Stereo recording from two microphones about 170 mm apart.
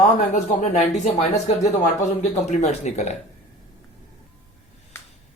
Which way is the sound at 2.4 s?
40° left (ahead or behind).